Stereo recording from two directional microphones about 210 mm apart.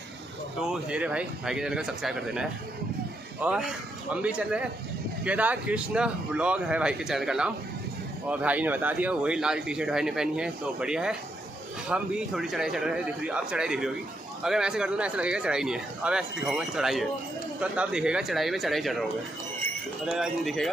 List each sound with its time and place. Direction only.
0.6 s speech: 5° right (ahead or behind)
20.1 s speech: centre (ahead or behind)